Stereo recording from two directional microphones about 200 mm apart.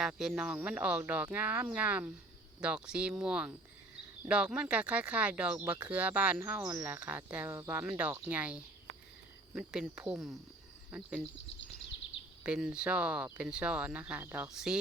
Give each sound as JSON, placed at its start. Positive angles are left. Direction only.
{"t": 0.0, "sound": "speech", "side_deg": 0}
{"t": 12.4, "sound": "speech", "side_deg": -5}